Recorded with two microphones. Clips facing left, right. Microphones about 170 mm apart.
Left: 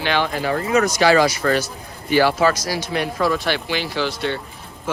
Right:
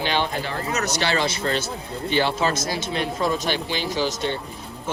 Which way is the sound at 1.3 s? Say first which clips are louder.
Left 5 dB; 25° right (ahead or behind).